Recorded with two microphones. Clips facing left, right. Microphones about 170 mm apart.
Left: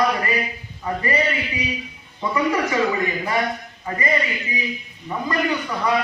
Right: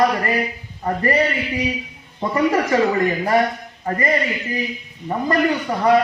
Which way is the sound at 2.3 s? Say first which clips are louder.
Right 4 dB; 50° right (ahead or behind).